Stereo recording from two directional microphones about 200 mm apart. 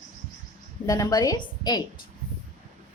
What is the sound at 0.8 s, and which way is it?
A woman's voice, 20° left (ahead or behind).